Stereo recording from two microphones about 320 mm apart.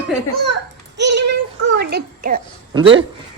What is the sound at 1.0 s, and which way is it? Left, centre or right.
A child's voice, right.